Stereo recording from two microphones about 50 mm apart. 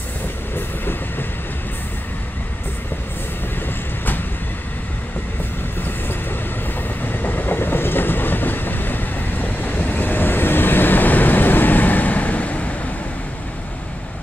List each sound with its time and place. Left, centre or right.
0.6 s train: left
7.0 s train: left